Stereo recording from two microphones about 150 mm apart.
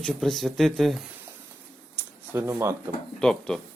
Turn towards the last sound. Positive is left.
turn(degrees=5)  # may be behind; listen again after turning